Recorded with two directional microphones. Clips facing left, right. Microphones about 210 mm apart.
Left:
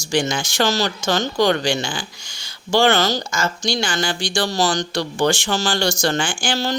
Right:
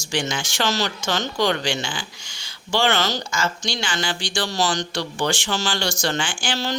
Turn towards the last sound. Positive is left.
turn(degrees=40)  # may be behind; listen again after turning